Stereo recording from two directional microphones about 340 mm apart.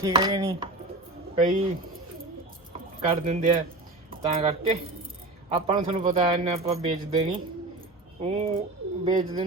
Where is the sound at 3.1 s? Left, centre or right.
Right.